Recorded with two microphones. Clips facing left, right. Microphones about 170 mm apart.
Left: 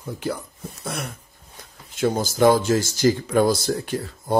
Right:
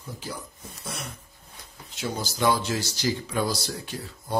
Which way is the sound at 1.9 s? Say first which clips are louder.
Left 10 dB; 50° left (ahead or behind).